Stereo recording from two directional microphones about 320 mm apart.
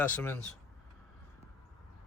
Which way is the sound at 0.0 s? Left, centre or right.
Centre.